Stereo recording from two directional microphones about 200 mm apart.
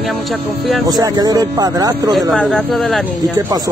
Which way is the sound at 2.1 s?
Centre (ahead or behind).